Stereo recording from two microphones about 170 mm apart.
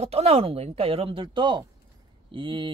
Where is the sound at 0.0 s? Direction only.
35° right (ahead or behind).